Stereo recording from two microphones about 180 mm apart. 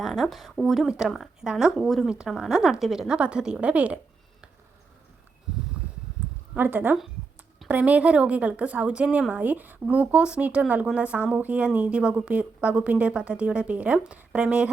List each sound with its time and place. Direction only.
0.0 s speech: centre (ahead or behind)
6.5 s a woman's voice: 10° right (ahead or behind)